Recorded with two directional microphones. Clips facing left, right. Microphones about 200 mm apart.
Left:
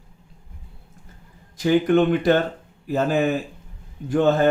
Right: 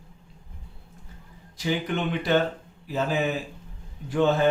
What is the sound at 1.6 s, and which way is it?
Speech, 50° left (ahead or behind).